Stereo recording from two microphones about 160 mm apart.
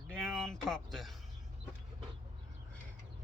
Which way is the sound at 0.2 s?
Centre (ahead or behind).